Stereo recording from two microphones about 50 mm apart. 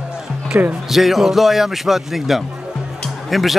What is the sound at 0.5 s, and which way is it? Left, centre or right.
Speech, right.